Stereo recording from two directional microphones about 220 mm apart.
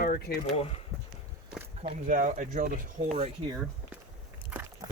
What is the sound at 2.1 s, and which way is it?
Speech, 35° right (ahead or behind).